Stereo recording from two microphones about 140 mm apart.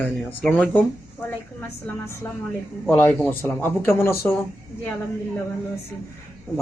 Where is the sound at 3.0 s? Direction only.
10° left (ahead or behind).